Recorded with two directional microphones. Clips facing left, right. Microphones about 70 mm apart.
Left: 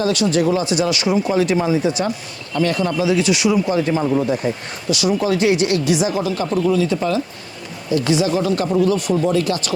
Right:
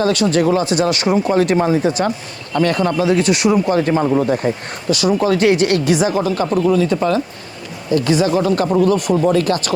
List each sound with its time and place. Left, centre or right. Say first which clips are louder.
0.0 s speech: right 2 dB; right